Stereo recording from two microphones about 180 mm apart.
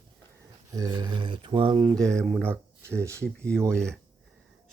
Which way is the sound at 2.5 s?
15° right (ahead or behind).